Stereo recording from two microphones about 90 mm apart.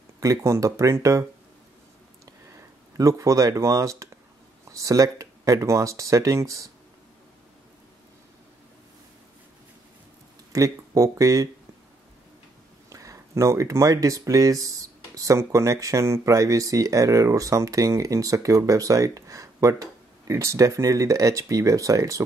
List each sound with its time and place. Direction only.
0.2 s speech: 35° right (ahead or behind)
3.0 s speech: 35° right (ahead or behind)
10.5 s speech: 40° right (ahead or behind)
12.9 s speech: 35° right (ahead or behind)